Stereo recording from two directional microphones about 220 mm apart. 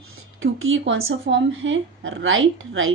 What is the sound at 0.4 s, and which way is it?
Speech, 65° right (ahead or behind).